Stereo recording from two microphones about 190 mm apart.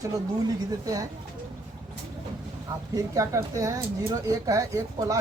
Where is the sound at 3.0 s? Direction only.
15° right (ahead or behind).